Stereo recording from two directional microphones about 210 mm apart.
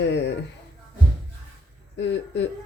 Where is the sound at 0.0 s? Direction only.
55° left (ahead or behind).